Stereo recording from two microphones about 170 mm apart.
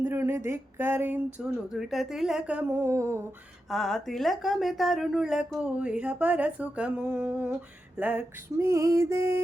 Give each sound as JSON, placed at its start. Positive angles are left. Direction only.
{"t": 0.0, "sound": "speech", "side_deg": -15}
{"t": 3.7, "sound": "speech", "side_deg": 0}